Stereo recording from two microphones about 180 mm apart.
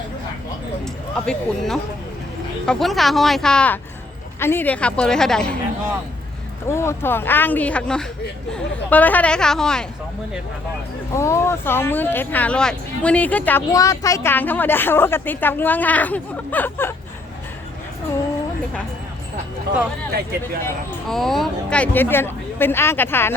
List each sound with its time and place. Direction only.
1.1 s speech: 5° left (ahead or behind)
6.7 s speech: 15° left (ahead or behind)
11.1 s speech: 15° left (ahead or behind)
20.1 s speech: 60° right (ahead or behind)
21.1 s speech: centre (ahead or behind)